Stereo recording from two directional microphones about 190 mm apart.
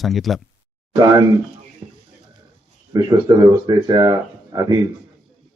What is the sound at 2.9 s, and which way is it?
A man's voice, 20° right (ahead or behind).